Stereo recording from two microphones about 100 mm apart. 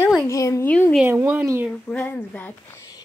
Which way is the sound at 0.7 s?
15° left (ahead or behind).